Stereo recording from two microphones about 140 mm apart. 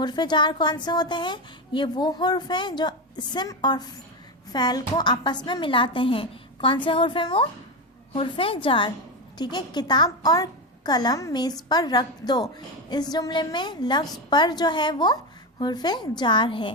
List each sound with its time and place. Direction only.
0.0 s a woman's voice: 30° left (ahead or behind)